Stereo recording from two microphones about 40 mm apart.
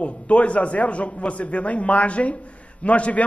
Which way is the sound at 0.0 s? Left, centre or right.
Left.